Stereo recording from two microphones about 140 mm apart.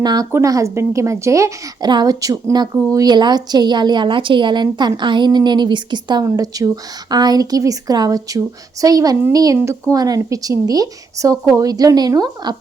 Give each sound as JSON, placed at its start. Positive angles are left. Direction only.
{"t": 0.0, "sound": "a woman's voice", "side_deg": -30}